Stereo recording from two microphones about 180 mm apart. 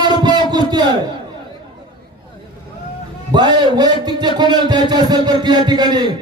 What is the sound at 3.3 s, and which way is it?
A man's voice, 25° right (ahead or behind).